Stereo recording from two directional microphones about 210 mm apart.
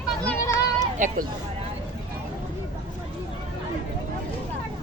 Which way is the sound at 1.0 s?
40° right (ahead or behind).